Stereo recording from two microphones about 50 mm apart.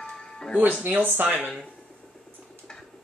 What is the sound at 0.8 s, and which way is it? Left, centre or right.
Speech, right.